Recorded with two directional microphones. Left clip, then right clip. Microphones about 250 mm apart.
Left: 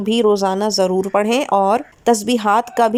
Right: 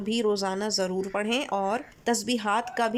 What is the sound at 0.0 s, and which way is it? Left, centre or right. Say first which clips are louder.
Speech: left 11 dB; centre.